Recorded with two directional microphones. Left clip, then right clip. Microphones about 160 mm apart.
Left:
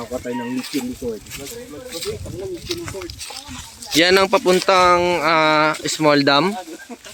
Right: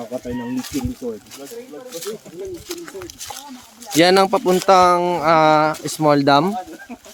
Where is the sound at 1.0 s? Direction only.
20° left (ahead or behind).